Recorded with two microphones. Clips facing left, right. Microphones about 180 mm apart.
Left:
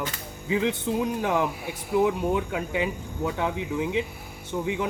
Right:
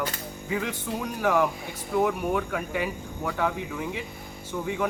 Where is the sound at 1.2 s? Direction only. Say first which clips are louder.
Right 1 dB; 20° left (ahead or behind).